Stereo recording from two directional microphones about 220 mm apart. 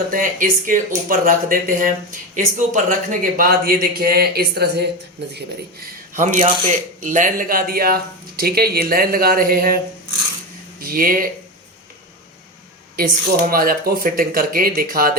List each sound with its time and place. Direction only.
0.1 s speech: 40° right (ahead or behind)
6.1 s speech: 35° right (ahead or behind)
13.5 s speech: 40° right (ahead or behind)